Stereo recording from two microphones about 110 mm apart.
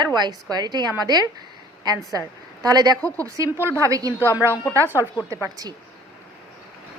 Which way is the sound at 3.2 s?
25° right (ahead or behind).